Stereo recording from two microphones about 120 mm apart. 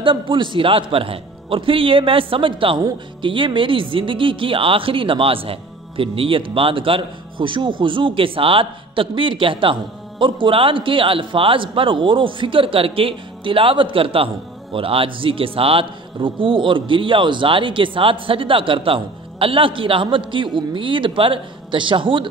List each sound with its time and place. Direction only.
0.0 s speech: 45° right (ahead or behind)